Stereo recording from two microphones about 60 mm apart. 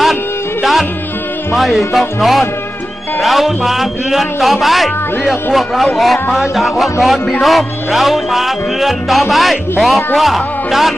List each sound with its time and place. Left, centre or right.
0.0 s music: centre
1.5 s speech: centre